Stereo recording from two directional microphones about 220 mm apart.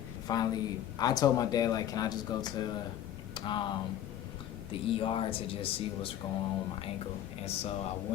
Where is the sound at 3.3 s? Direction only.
20° left (ahead or behind).